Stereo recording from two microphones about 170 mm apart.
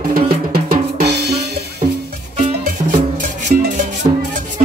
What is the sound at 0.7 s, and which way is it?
Drum kit, 65° right (ahead or behind).